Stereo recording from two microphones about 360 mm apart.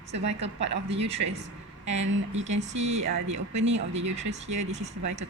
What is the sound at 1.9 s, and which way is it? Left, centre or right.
Speech, right.